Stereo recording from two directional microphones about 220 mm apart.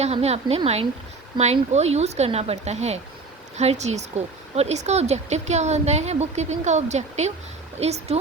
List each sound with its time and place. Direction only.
0.0 s speech: 30° right (ahead or behind)